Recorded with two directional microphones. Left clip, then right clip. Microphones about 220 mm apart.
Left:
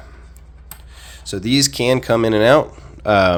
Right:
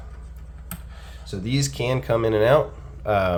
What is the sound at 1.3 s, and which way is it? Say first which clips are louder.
Speech: left 10 dB; 45° left (ahead or behind).